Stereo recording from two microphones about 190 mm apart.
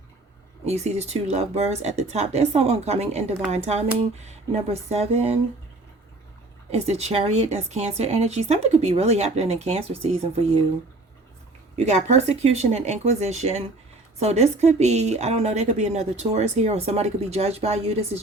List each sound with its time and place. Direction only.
0.6 s a woman's voice: 35° right (ahead or behind)
6.7 s a woman's voice: 35° right (ahead or behind)
11.8 s a woman's voice: 35° right (ahead or behind)